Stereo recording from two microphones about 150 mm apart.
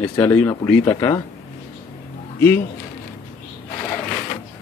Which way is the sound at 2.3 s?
15° left (ahead or behind).